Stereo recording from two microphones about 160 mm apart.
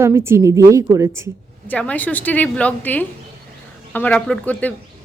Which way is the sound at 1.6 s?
10° left (ahead or behind).